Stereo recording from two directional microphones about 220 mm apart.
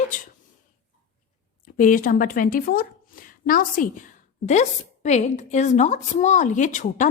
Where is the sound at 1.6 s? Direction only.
35° left (ahead or behind).